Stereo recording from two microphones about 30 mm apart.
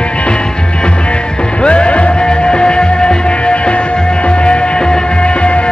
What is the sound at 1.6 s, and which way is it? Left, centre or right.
Music, left.